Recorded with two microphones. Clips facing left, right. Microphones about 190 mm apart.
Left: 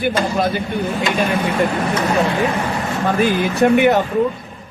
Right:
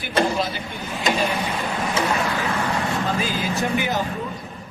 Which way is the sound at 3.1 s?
60° left (ahead or behind).